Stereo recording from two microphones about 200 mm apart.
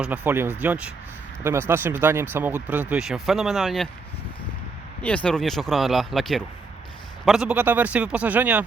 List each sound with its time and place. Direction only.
0.0 s speech: 10° right (ahead or behind)
5.0 s speech: 5° left (ahead or behind)